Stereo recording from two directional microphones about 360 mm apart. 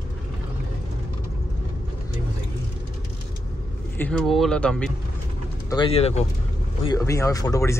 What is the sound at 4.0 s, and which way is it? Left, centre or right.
Speech, centre.